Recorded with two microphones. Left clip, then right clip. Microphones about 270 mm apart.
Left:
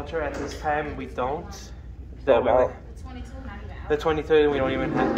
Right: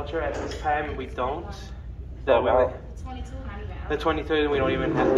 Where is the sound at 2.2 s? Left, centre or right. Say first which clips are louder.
Left 1 dB; left.